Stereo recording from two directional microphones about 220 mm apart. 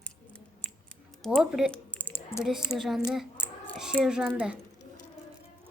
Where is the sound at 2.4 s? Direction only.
Centre (ahead or behind).